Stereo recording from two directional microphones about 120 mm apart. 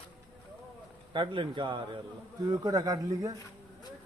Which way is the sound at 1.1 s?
45° right (ahead or behind).